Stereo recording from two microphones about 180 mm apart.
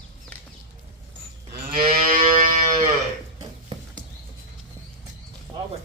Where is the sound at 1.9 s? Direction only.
55° right (ahead or behind).